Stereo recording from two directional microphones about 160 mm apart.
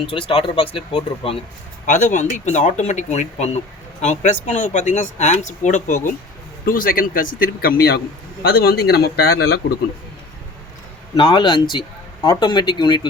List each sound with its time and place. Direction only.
0.0 s speech: 35° left (ahead or behind)
1.9 s speech: 50° left (ahead or behind)
6.7 s a man's voice: 60° left (ahead or behind); by 9.7 s 80° left
11.1 s speech: 30° left (ahead or behind)